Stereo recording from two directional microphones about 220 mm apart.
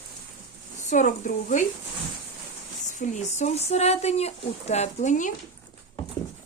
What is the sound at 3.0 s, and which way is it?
Speech, 30° left (ahead or behind).